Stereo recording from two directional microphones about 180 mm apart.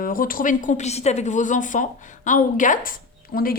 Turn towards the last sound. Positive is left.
turn(degrees=50)  # may be behind; listen again after turning